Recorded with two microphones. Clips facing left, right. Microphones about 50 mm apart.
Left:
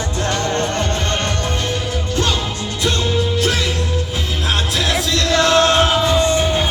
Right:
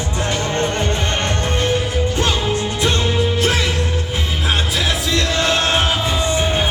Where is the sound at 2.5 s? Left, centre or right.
Right.